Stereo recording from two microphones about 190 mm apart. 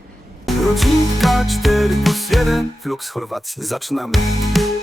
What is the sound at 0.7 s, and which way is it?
Music, centre (ahead or behind).